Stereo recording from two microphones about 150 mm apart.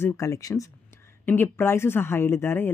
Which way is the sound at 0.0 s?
20° left (ahead or behind).